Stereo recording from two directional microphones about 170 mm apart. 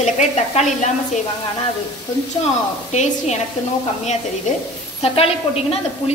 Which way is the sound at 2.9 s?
45° left (ahead or behind).